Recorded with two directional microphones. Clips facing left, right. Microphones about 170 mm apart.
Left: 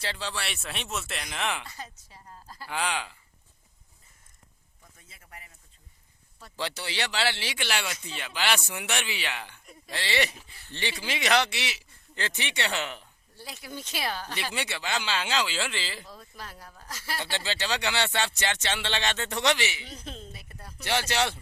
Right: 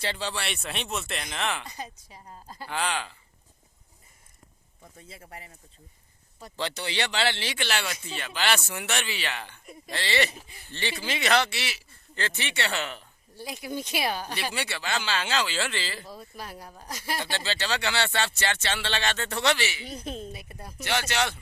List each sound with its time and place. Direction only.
0.0 s speech: centre (ahead or behind)
1.6 s speech: 15° right (ahead or behind)
2.6 s speech: 10° left (ahead or behind)
4.8 s speech: 30° right (ahead or behind)
6.6 s speech: 5° left (ahead or behind)
10.2 s speech: 15° right (ahead or behind)
11.0 s speech: 15° left (ahead or behind)
13.3 s speech: 15° right (ahead or behind)
14.5 s speech: 20° left (ahead or behind)
16.0 s speech: 10° right (ahead or behind)
17.3 s speech: 15° left (ahead or behind)
19.8 s speech: 15° right (ahead or behind)
20.8 s speech: 30° left (ahead or behind)